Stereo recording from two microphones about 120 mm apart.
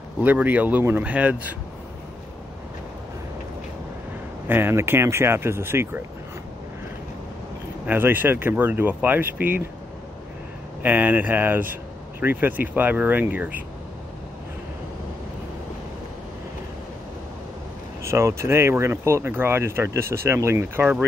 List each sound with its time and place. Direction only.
0.2 s speech: 15° right (ahead or behind)
4.5 s speech: 20° right (ahead or behind)
7.8 s speech: 15° right (ahead or behind)
10.8 s speech: 15° right (ahead or behind)
18.0 s speech: 25° right (ahead or behind)